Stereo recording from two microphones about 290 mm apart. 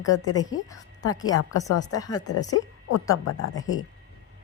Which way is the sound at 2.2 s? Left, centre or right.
Left.